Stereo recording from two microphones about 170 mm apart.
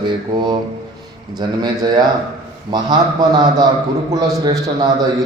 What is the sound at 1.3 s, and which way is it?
A man's voice, 25° right (ahead or behind).